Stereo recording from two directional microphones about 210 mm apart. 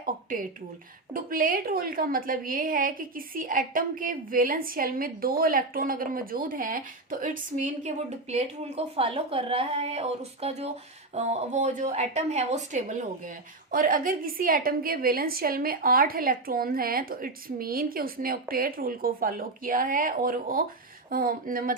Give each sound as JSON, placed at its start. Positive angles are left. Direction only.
{"t": 0.0, "sound": "a woman's voice", "side_deg": -40}